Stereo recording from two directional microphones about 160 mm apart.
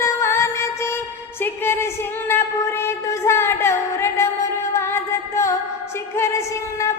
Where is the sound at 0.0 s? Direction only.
15° left (ahead or behind).